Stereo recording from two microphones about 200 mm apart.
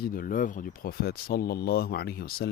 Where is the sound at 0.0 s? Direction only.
45° left (ahead or behind).